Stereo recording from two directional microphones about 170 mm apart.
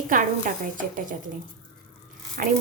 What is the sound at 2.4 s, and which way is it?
Speech, 55° right (ahead or behind).